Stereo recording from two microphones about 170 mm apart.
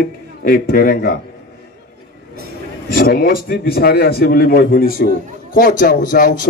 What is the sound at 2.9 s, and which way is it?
A man's voice, 60° left (ahead or behind).